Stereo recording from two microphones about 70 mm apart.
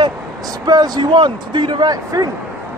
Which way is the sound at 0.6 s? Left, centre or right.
Right.